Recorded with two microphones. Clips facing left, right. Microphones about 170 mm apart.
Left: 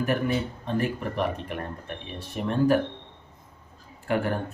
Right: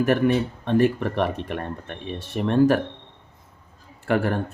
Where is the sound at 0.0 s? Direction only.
80° right.